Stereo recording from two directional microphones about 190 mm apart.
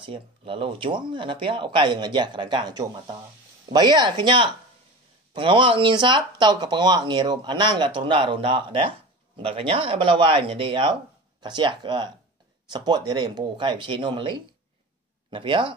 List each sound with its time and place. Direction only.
0.0 s speech: 25° right (ahead or behind)